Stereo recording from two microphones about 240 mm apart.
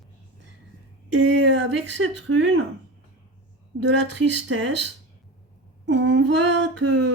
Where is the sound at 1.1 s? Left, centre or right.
Right.